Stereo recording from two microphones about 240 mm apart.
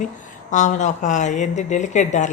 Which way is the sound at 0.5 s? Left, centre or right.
Left.